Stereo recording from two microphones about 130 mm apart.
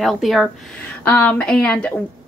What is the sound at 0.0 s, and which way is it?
Speech, centre (ahead or behind).